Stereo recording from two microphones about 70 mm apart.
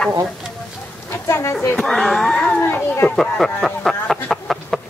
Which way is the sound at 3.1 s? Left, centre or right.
Centre.